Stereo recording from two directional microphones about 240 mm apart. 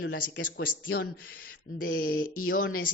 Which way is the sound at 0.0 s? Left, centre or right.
Left.